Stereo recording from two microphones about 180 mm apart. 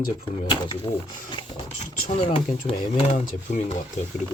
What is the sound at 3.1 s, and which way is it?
Speech, 45° left (ahead or behind).